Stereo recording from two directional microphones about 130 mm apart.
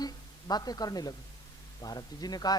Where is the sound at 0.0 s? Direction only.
30° left (ahead or behind).